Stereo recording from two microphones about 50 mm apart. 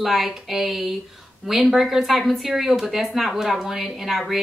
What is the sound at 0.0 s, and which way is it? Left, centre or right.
Speech, centre.